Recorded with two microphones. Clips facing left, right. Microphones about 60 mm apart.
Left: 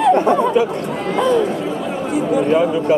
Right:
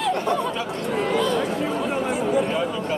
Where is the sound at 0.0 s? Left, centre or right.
Left.